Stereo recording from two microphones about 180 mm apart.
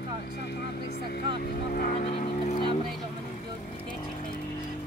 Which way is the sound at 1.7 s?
50° left (ahead or behind).